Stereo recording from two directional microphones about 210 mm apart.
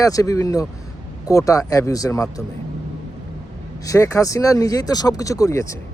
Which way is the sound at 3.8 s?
15° left (ahead or behind).